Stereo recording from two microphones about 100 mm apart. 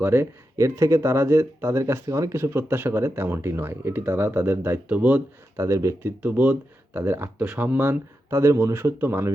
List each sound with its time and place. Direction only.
0.0 s speech: 25° right (ahead or behind)
5.5 s speech: 30° right (ahead or behind)